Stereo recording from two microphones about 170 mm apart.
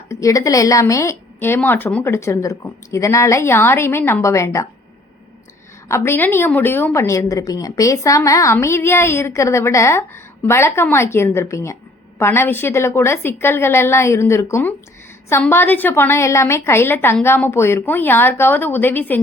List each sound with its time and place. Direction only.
0.1 s a woman's voice: 20° left (ahead or behind)
5.9 s a woman's voice: 15° left (ahead or behind)